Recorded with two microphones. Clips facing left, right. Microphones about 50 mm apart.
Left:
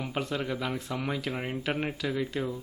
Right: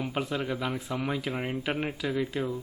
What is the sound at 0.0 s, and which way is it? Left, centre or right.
Speech, centre.